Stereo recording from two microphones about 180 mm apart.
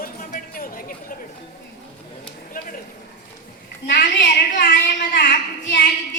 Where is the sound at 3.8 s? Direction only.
55° left (ahead or behind).